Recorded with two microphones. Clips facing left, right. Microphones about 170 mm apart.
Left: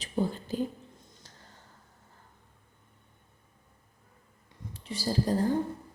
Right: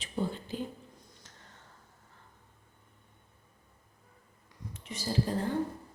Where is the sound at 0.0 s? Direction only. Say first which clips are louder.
Left 4 dB; 40° left (ahead or behind).